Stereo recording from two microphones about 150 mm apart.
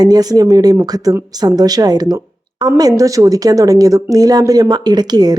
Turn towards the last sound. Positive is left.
turn(degrees=-25)  # may be behind; listen again after turning